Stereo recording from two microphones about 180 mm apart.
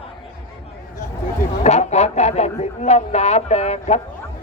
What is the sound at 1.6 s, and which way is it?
Speech, 40° left (ahead or behind).